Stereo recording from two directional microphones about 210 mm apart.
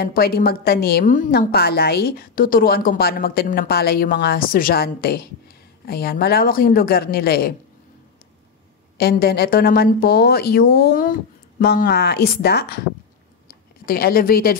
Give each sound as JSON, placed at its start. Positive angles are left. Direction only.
{"t": 0.0, "sound": "a woman's voice", "side_deg": 45}
{"t": 8.9, "sound": "a woman's voice", "side_deg": 45}